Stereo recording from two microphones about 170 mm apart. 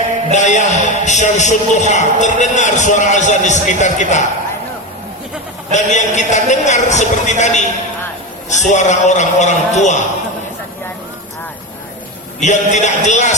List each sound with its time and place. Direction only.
0.3 s a man's voice: 45° left (ahead or behind)
5.7 s a man's voice: 45° left (ahead or behind)
12.4 s a man's voice: 45° left (ahead or behind)